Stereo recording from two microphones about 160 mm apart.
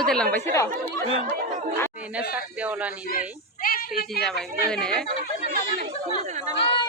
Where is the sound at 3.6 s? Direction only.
70° left (ahead or behind).